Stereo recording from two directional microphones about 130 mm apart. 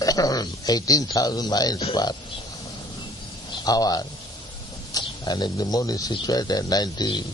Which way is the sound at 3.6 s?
30° left (ahead or behind).